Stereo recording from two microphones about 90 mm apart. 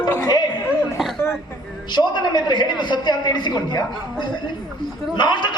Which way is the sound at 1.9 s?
55° left (ahead or behind).